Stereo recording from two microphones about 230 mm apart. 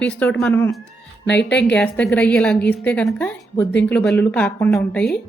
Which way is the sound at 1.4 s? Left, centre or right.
Left.